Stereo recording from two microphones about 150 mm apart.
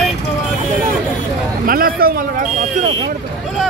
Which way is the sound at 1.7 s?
75° right (ahead or behind).